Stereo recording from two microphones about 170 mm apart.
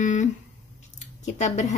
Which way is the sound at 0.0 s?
45° left (ahead or behind).